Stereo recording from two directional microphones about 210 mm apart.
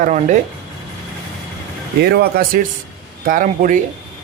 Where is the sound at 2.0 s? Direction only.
50° right (ahead or behind).